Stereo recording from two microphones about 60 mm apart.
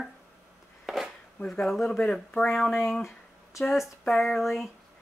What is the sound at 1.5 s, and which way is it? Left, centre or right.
A woman's voice, centre.